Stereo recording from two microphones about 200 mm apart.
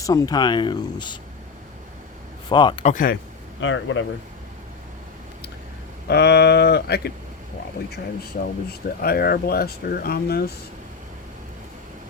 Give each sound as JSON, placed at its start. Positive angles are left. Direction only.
{"t": 0.0, "sound": "speech", "side_deg": 15}
{"t": 2.5, "sound": "speech", "side_deg": 20}
{"t": 2.8, "sound": "speech", "side_deg": 40}
{"t": 3.6, "sound": "speech", "side_deg": 70}
{"t": 6.1, "sound": "speech", "side_deg": 55}
{"t": 9.0, "sound": "speech", "side_deg": 50}